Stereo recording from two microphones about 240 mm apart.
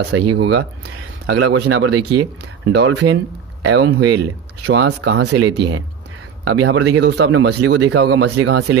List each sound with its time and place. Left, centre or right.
0.0 s speech: right